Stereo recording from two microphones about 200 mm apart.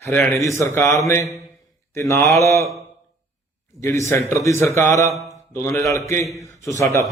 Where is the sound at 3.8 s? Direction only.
15° left (ahead or behind).